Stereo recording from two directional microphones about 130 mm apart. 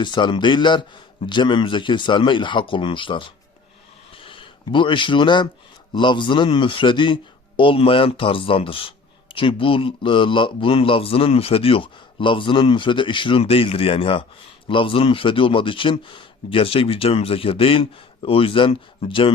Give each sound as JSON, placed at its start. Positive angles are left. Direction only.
{"t": 0.0, "sound": "speech", "side_deg": 35}
{"t": 4.1, "sound": "a sound", "side_deg": 45}
{"t": 5.9, "sound": "a man's voice", "side_deg": 40}